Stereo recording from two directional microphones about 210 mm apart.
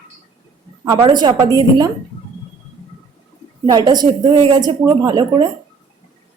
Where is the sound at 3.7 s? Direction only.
20° right (ahead or behind).